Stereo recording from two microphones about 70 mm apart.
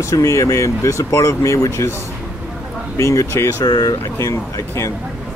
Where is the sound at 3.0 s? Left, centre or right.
Left.